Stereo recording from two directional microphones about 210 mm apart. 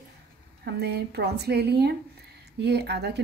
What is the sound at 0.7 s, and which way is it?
Speech, 50° right (ahead or behind).